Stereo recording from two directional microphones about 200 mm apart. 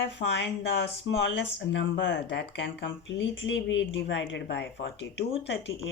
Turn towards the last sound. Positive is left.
turn(degrees=60)  # may be behind; listen again after turning